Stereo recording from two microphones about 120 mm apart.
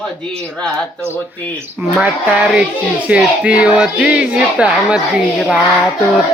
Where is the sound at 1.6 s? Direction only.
15° right (ahead or behind).